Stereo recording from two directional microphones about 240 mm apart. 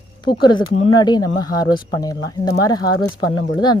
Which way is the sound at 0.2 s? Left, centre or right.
Centre.